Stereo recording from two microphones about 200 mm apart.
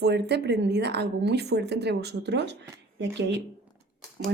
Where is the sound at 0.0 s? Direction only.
55° right (ahead or behind).